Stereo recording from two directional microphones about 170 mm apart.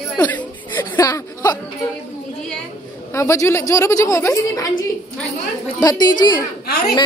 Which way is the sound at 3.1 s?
15° left (ahead or behind).